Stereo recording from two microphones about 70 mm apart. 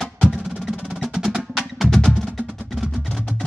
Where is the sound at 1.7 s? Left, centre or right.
Centre.